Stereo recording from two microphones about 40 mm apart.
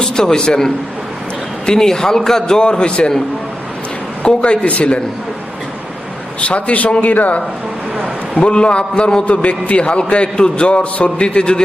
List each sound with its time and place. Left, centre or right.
0.0 s a man's voice: centre
2.6 s a man's voice: left
4.3 s a man's voice: left
6.4 s a man's voice: left
8.4 s a man's voice: left
9.2 s a man's voice: left; by 10.7 s centre
10.7 s a man's voice: left